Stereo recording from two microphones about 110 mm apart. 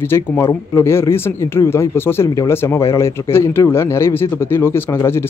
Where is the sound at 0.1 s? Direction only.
25° left (ahead or behind).